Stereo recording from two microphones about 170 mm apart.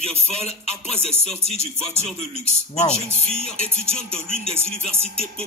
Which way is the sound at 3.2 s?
35° right (ahead or behind).